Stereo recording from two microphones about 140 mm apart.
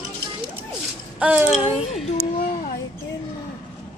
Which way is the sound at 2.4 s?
75° left (ahead or behind).